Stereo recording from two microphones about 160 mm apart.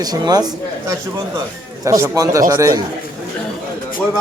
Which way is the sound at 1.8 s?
20° right (ahead or behind).